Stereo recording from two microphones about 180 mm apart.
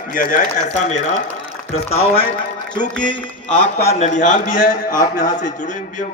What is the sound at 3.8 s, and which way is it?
A man's voice, 40° left (ahead or behind).